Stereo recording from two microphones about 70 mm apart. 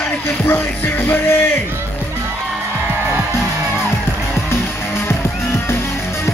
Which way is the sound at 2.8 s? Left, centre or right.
Right.